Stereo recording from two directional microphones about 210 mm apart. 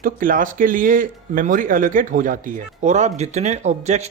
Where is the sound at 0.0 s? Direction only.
40° right (ahead or behind).